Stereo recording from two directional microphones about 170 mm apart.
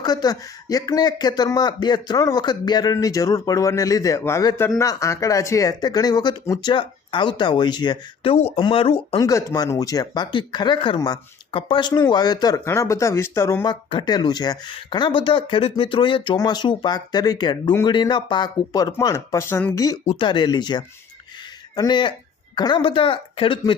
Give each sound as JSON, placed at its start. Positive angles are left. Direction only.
{"t": 0.0, "sound": "speech", "side_deg": 25}
{"t": 9.1, "sound": "speech", "side_deg": 20}